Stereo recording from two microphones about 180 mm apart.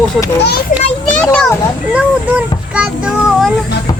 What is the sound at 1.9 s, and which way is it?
Speech, 5° right (ahead or behind).